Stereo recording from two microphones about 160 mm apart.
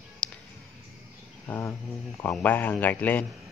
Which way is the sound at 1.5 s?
15° left (ahead or behind).